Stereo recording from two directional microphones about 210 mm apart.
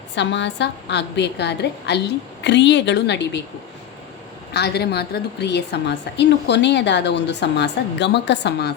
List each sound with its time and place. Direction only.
0.2 s a woman's voice: 55° left (ahead or behind)
4.5 s a woman's voice: 50° left (ahead or behind)